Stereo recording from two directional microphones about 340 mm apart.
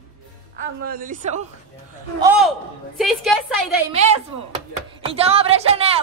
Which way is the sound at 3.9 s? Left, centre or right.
Centre.